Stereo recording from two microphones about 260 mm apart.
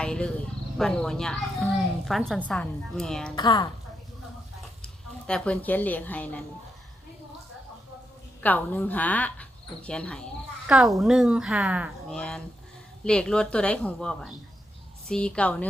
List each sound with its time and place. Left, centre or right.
0.0 s speech: centre
3.3 s a woman's voice: centre
4.8 s speech: centre
8.4 s speech: centre